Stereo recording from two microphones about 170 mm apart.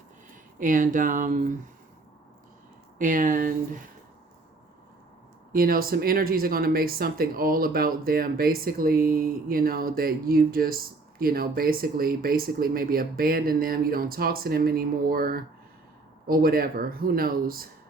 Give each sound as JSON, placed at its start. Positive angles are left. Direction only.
{"t": 0.6, "sound": "speech", "side_deg": -55}
{"t": 3.0, "sound": "speech", "side_deg": -50}
{"t": 5.5, "sound": "speech", "side_deg": -60}